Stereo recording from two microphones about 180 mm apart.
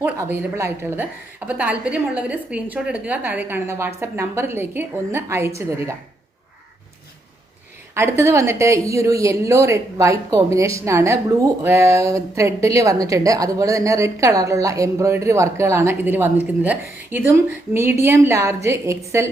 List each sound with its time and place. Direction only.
0.0 s a woman's voice: 10° right (ahead or behind)
7.9 s a woman's voice: 15° right (ahead or behind)